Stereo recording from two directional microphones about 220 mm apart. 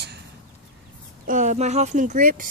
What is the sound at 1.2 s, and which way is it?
Speech, 35° right (ahead or behind).